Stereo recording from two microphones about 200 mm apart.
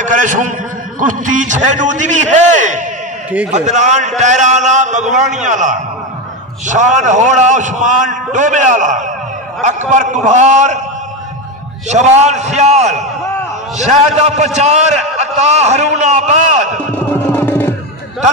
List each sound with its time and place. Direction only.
0.0 s a man's voice: 40° right (ahead or behind)
11.9 s a man's voice: 35° right (ahead or behind)
17.3 s music: 10° left (ahead or behind)